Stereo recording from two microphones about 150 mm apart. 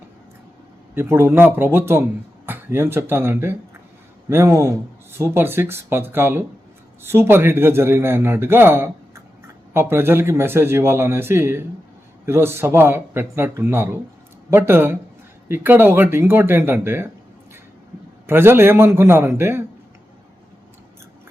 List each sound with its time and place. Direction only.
0.9 s speech: 15° right (ahead or behind)
18.3 s speech: 15° right (ahead or behind)